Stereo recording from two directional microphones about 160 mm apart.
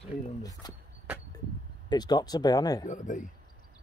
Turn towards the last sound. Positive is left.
turn(degrees=50)  # may be behind; listen again after turning